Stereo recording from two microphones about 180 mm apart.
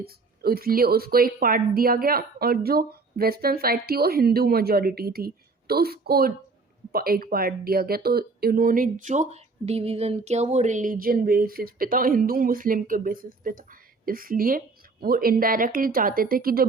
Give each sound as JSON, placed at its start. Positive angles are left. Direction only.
{"t": 0.0, "sound": "a woman's voice", "side_deg": -60}